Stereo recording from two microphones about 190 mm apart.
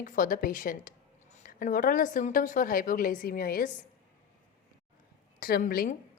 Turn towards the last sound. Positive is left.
turn(degrees=45)  # may be behind; listen again after turning